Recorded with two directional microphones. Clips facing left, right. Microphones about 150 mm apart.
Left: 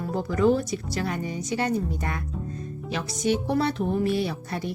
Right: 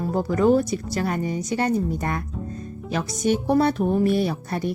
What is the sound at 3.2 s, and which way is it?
A woman's voice, 45° right (ahead or behind).